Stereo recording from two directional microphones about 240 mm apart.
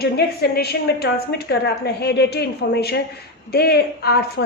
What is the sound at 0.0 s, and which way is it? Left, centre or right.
A woman's voice, left.